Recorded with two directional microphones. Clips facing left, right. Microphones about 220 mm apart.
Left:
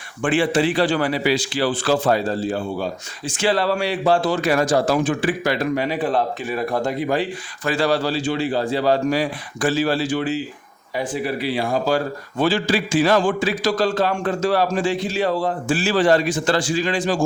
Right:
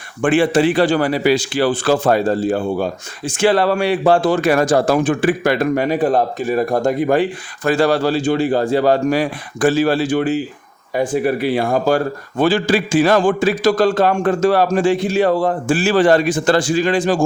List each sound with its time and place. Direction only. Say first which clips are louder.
0.2 s a man's voice: right 5 dB; 50° right (ahead or behind)